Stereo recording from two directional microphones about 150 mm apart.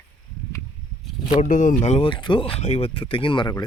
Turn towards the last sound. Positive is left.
turn(degrees=35)  # may be behind; listen again after turning